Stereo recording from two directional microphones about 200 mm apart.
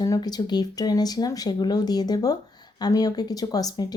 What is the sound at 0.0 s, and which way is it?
Speech, 20° left (ahead or behind).